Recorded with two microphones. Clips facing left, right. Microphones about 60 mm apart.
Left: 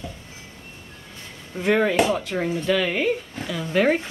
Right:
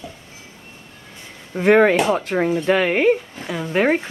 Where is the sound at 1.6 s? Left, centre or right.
Right.